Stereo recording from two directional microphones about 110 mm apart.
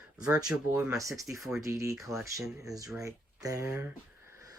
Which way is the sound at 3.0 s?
30° right (ahead or behind).